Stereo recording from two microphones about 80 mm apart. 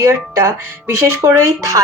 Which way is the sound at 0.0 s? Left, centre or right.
Right.